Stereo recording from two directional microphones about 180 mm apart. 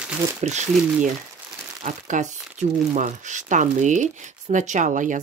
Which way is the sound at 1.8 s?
45° right (ahead or behind).